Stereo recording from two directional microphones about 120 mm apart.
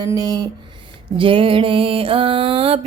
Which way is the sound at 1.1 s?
45° right (ahead or behind).